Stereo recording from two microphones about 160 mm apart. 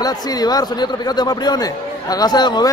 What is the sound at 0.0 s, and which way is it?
A man's voice, 25° left (ahead or behind).